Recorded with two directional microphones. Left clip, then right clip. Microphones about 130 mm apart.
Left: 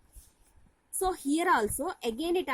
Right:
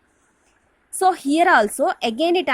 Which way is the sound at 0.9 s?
15° right (ahead or behind).